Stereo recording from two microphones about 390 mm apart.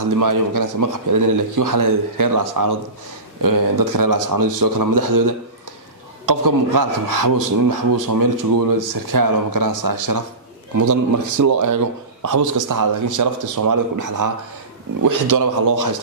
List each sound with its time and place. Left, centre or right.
0.2 s speech: right